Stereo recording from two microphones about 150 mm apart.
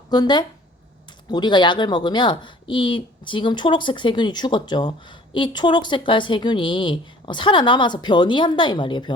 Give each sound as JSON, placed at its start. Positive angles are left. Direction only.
{"t": 0.1, "sound": "speech", "side_deg": 30}